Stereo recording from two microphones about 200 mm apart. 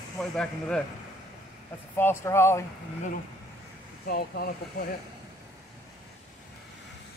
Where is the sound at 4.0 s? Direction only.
50° left (ahead or behind).